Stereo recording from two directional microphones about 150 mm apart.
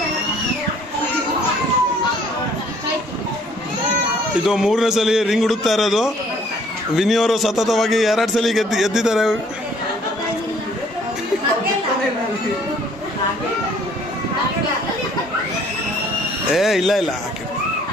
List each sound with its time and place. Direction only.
4.5 s a man's voice: 5° right (ahead or behind)
16.5 s a man's voice: centre (ahead or behind)